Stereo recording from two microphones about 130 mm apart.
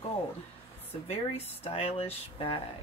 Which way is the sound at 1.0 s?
50° left (ahead or behind).